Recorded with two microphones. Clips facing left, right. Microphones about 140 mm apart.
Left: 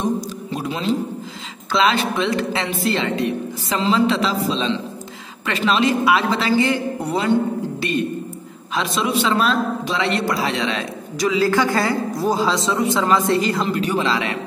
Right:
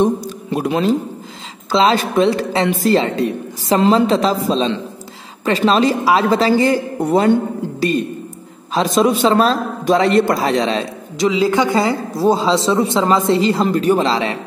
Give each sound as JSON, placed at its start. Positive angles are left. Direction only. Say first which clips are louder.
{"t": 0.0, "sound": "a sound", "louder": "right 6 dB", "side_deg": -55}
{"t": 1.7, "sound": "a man's voice", "louder": "right 4 dB", "side_deg": -35}
{"t": 8.7, "sound": "a man's voice", "louder": "right 6 dB", "side_deg": -40}
{"t": 11.1, "sound": "speech", "louder": "right 3 dB", "side_deg": -25}
{"t": 13.7, "sound": "a man's voice", "louder": "right 6 dB", "side_deg": -40}